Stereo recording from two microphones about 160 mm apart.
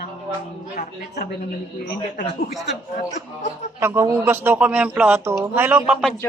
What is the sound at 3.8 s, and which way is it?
A man's voice, 15° right (ahead or behind).